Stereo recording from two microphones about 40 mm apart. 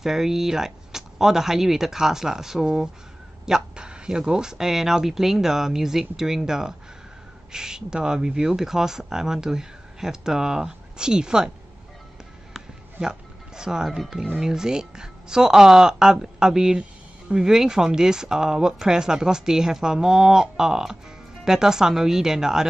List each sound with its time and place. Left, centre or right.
0.0 s speech: centre
13.0 s speech: centre